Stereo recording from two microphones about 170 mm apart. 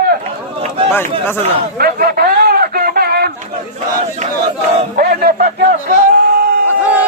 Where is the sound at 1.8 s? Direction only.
65° right (ahead or behind).